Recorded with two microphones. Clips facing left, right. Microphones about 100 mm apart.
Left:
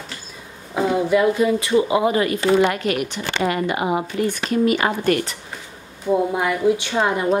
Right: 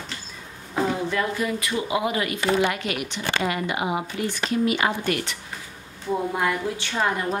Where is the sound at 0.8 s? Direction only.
15° left (ahead or behind); by 5.4 s 45° left (ahead or behind).